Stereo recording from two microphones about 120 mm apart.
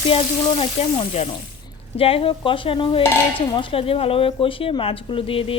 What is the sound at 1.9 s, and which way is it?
Speech, 50° left (ahead or behind).